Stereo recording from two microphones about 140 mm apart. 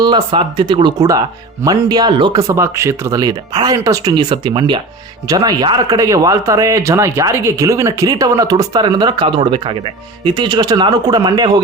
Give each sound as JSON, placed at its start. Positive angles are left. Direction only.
{"t": 0.0, "sound": "a man's voice", "side_deg": -35}
{"t": 2.4, "sound": "a man's voice", "side_deg": -20}